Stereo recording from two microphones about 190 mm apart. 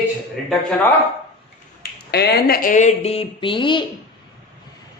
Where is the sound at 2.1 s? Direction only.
60° left (ahead or behind); by 3.8 s 25° left (ahead or behind).